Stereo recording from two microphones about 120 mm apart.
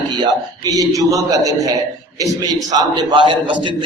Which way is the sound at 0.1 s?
35° right (ahead or behind).